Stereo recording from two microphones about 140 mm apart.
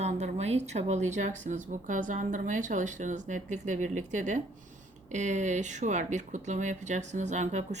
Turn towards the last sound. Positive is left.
turn(degrees=-55)  # may be behind; listen again after turning